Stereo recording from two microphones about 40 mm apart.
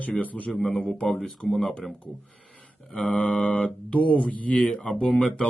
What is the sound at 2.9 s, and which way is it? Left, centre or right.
Mantra, left.